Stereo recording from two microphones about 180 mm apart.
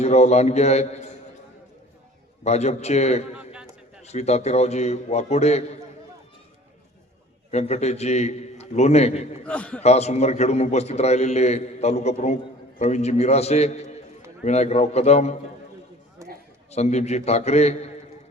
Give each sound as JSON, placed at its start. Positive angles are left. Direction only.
{"t": 0.0, "sound": "a man's voice", "side_deg": 35}
{"t": 2.4, "sound": "a man's voice", "side_deg": 35}
{"t": 3.3, "sound": "a sound", "side_deg": -5}
{"t": 4.0, "sound": "a man's voice", "side_deg": 35}
{"t": 7.5, "sound": "a man's voice", "side_deg": 40}
{"t": 9.5, "sound": "a man's voice", "side_deg": 5}
{"t": 9.8, "sound": "a man's voice", "side_deg": 35}
{"t": 16.2, "sound": "a sound", "side_deg": -15}
{"t": 16.7, "sound": "a man's voice", "side_deg": 35}